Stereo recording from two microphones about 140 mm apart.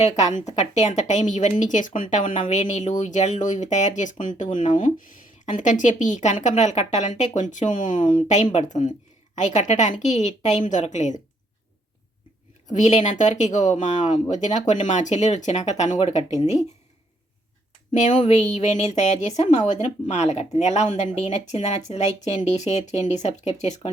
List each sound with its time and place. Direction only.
0.0 s a woman's voice: 55° left (ahead or behind)
12.7 s a woman's voice: 55° left (ahead or behind)
17.9 s speech: 55° left (ahead or behind)